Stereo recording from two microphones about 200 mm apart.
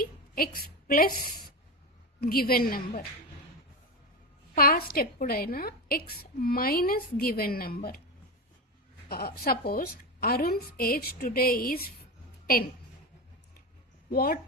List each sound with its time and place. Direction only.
0.0 s a sound: 45° left (ahead or behind)
2.2 s a woman's voice: 50° left (ahead or behind)
4.5 s a woman's voice: 45° left (ahead or behind)
9.0 s a woman's voice: 50° left (ahead or behind)
14.1 s a woman's voice: 50° left (ahead or behind)